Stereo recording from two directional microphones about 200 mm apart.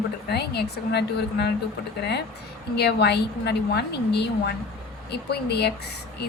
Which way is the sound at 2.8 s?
55° left (ahead or behind).